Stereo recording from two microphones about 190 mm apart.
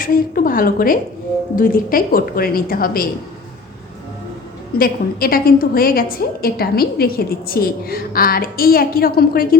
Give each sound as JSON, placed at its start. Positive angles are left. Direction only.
{"t": 0.0, "sound": "a woman's voice", "side_deg": 50}
{"t": 4.8, "sound": "a woman's voice", "side_deg": 50}